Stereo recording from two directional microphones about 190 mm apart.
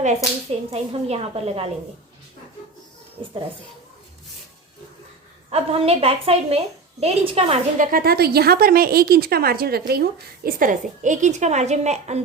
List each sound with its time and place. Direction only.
0.7 s a woman's voice: 35° right (ahead or behind)
5.5 s a woman's voice: 30° right (ahead or behind)
7.9 s a woman's voice: 50° right (ahead or behind); by 12.2 s 35° right (ahead or behind)